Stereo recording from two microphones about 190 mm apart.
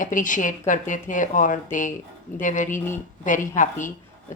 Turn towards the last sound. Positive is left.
turn(degrees=40)  # may be behind; listen again after turning